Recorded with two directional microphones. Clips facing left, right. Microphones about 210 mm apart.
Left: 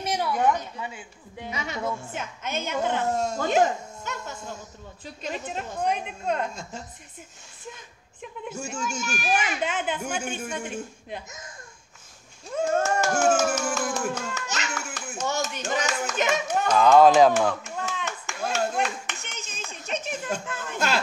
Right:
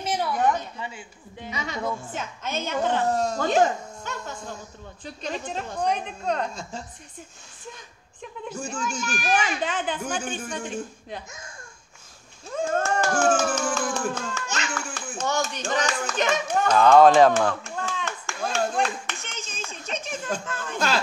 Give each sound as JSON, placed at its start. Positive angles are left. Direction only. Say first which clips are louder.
{"t": 1.5, "sound": "a woman's voice", "louder": "right 1 dB", "side_deg": 5}
{"t": 8.6, "sound": "a woman's voice", "louder": "right 2 dB", "side_deg": 10}
{"t": 11.2, "sound": "speech", "louder": "even", "side_deg": 20}
{"t": 12.5, "sound": "a sound", "louder": "left 1 dB", "side_deg": 5}
{"t": 15.0, "sound": "clapping", "louder": "right 2 dB", "side_deg": 10}
{"t": 19.2, "sound": "a sound", "louder": "right 2 dB", "side_deg": 10}